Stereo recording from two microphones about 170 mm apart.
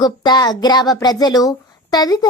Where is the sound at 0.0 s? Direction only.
25° left (ahead or behind).